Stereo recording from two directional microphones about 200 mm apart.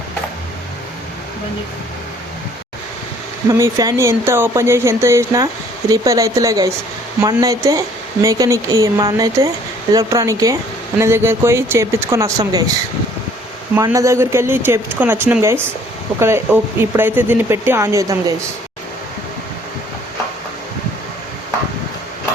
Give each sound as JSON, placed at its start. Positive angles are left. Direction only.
{"t": 3.5, "sound": "speech", "side_deg": -15}
{"t": 13.7, "sound": "speech", "side_deg": -15}